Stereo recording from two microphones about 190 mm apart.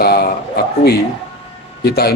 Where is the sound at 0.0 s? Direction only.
55° left (ahead or behind).